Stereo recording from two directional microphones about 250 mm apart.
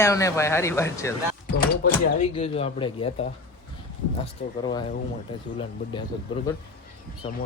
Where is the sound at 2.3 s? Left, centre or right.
Left.